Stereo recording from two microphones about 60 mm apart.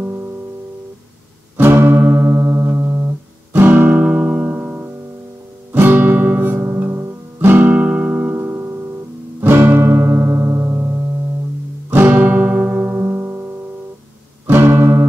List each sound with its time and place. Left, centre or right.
0.0 s music: right
1.6 s music: right